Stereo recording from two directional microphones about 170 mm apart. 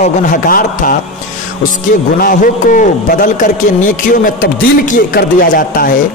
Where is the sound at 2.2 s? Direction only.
55° left (ahead or behind).